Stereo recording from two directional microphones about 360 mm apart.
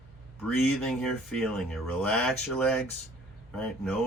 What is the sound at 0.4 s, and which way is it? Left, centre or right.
Speech, centre.